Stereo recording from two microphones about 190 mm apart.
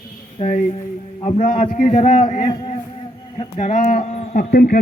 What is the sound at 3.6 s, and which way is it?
Speech, 40° left (ahead or behind).